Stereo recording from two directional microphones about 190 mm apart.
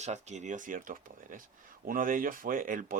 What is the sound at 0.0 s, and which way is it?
Speech, 35° right (ahead or behind).